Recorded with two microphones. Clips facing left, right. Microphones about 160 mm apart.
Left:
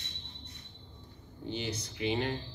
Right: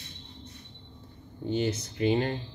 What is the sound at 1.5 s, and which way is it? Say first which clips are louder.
Speech: right 9 dB; 45° right (ahead or behind).